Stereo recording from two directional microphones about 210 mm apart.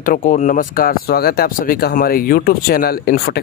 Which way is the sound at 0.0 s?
40° left (ahead or behind).